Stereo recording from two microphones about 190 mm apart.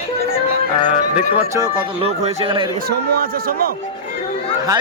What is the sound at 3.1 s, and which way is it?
Speech, 50° right (ahead or behind).